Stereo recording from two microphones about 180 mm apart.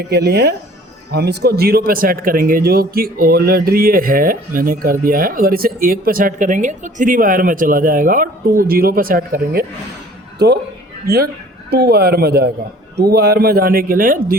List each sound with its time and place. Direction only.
0.1 s a man's voice: 65° right (ahead or behind)
10.3 s a man's voice: 65° right (ahead or behind)